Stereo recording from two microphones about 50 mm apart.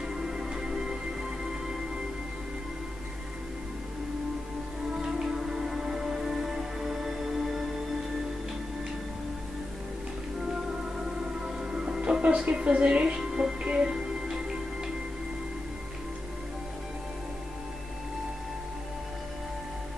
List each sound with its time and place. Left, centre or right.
0.1 s music: centre
4.9 s music: centre
11.1 s music: centre
12.4 s speech: centre